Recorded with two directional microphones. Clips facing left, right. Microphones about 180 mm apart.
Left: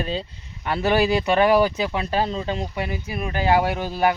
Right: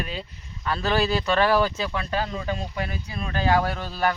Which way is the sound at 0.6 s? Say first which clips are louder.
Left 4 dB; 20° left (ahead or behind).